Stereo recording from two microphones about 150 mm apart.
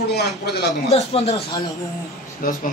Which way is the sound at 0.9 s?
45° left (ahead or behind).